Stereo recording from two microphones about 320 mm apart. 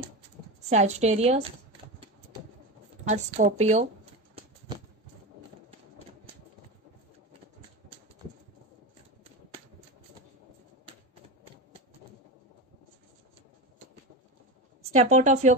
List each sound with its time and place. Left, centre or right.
0.6 s a woman's voice: right
3.1 s a sound: right
14.8 s a woman's voice: right